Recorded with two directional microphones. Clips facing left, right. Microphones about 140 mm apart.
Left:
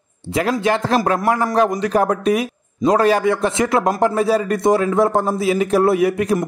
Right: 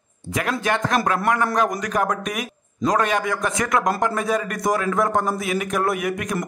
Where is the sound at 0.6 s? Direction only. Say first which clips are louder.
Left 2 dB; 30° left (ahead or behind).